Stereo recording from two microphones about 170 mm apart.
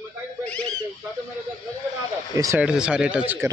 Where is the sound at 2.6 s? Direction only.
5° right (ahead or behind).